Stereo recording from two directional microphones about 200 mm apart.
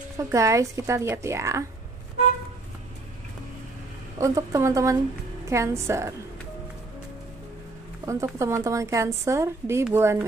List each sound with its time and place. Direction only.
0.2 s a woman's voice: 15° right (ahead or behind)
4.2 s a woman's voice: 15° right (ahead or behind)
8.0 s a woman's voice: 15° right (ahead or behind)